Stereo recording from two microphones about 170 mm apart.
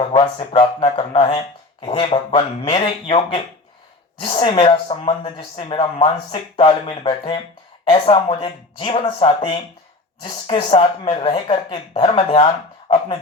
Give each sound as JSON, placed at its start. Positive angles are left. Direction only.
{"t": 0.1, "sound": "speech", "side_deg": 35}